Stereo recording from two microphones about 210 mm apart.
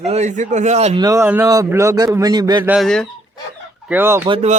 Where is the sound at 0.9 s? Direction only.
15° right (ahead or behind).